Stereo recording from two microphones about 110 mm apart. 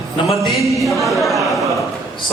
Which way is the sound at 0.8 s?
Centre (ahead or behind).